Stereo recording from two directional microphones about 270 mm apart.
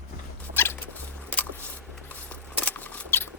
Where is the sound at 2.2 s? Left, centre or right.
Centre.